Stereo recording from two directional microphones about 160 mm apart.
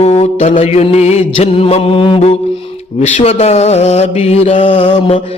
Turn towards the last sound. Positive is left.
turn(degrees=40)  # may be behind; listen again after turning